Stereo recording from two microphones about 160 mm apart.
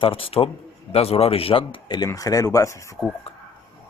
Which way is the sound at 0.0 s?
35° left (ahead or behind).